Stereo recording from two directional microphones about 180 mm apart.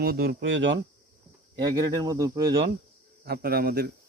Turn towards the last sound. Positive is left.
turn(degrees=-60)  # may be behind; listen again after turning